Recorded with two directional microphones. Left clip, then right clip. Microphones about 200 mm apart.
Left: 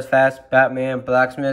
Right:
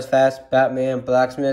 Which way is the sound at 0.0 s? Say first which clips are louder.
Left 1 dB; centre (ahead or behind).